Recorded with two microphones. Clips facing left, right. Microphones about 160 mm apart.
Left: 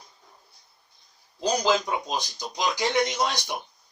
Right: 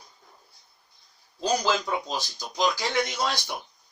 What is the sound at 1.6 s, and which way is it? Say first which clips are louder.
Speech: left 2 dB; 15° left (ahead or behind).